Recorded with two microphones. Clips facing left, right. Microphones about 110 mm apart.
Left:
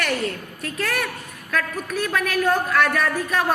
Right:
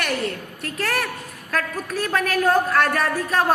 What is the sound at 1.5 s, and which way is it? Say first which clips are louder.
A woman's voice: even; 35° right (ahead or behind).